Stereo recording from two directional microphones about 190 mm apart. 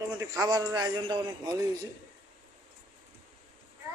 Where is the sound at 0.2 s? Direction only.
20° right (ahead or behind).